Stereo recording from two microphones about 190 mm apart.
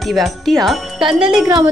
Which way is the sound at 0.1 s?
Centre (ahead or behind).